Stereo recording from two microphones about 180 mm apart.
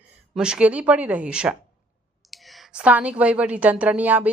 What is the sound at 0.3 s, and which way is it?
A woman's voice, 5° right (ahead or behind).